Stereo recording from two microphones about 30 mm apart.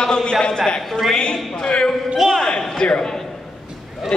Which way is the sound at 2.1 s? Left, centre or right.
Centre.